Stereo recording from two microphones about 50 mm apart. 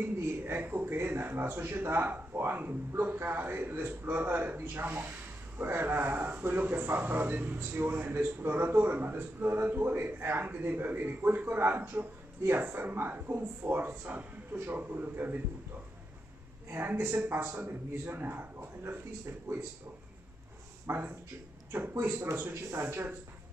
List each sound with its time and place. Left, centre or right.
0.0 s speech: right
11.9 s speech: right
12.4 s speech: right
16.7 s speech: right
20.8 s speech: right